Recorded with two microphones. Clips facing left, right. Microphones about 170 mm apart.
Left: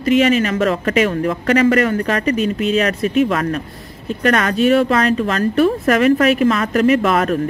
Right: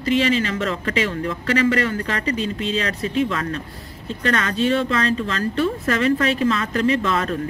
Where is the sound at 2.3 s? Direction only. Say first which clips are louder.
Left 5 dB; 30° right (ahead or behind).